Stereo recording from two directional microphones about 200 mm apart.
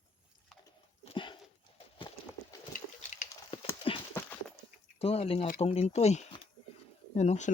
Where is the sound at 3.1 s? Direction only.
30° left (ahead or behind).